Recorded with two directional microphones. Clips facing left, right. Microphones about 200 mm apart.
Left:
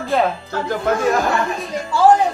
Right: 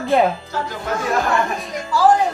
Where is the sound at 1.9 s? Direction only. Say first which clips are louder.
Left 2 dB; 25° left (ahead or behind).